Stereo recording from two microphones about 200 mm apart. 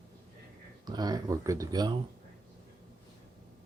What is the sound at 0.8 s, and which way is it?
Speech, 20° right (ahead or behind).